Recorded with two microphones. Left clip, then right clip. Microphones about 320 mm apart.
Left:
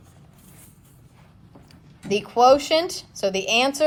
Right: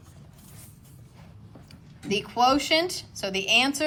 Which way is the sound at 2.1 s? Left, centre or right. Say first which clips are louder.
Left 6 dB; centre.